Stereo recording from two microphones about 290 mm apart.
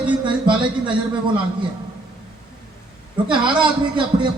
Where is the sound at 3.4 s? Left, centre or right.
Centre.